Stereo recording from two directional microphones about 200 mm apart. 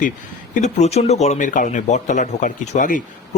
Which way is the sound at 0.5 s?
35° left (ahead or behind).